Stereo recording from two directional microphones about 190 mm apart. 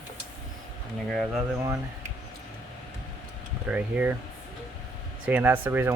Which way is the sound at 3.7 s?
10° right (ahead or behind).